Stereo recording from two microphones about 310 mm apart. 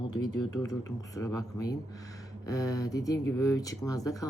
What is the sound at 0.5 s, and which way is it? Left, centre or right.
Speech, centre.